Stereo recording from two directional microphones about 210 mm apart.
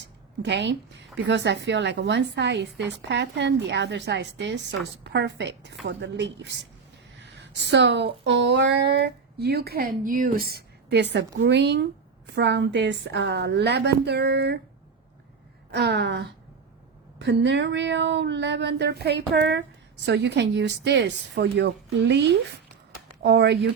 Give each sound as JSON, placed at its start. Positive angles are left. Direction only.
{"t": 0.4, "sound": "a woman's voice", "side_deg": -55}
{"t": 15.7, "sound": "a woman's voice", "side_deg": -55}